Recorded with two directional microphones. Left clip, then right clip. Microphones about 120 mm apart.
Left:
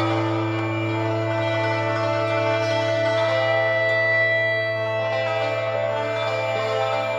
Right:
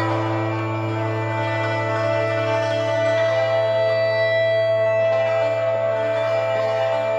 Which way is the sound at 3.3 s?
Centre (ahead or behind).